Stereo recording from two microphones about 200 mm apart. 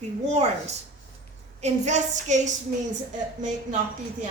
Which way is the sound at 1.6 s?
35° right (ahead or behind).